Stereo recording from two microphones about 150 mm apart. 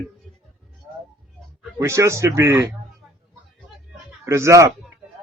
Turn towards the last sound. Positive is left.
turn(degrees=-20)  # may be behind; listen again after turning